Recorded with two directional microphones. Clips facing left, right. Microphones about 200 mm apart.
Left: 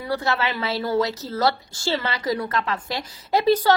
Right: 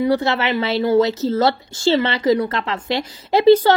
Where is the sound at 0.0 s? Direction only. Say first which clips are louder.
Right 7 dB; 25° right (ahead or behind).